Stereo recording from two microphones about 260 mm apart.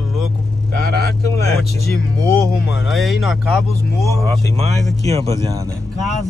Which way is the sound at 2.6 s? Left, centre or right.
Centre.